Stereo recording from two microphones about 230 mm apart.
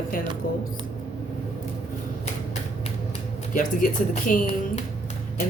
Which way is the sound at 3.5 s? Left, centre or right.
Left.